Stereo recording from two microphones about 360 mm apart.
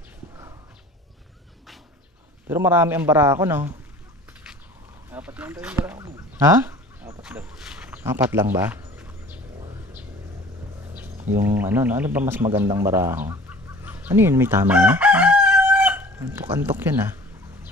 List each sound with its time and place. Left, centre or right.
2.5 s a man's voice: centre
5.1 s dog: centre
9.6 s a sound: centre
11.2 s speech: centre